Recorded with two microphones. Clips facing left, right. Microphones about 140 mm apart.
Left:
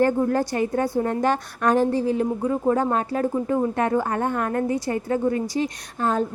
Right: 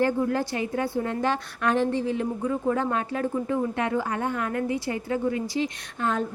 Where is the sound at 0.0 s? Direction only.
45° left (ahead or behind).